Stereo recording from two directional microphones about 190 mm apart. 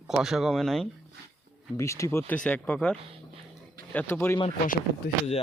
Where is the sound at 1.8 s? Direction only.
15° left (ahead or behind).